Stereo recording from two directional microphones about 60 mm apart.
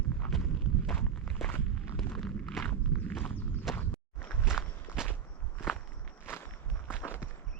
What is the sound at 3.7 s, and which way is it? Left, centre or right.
Walk, centre.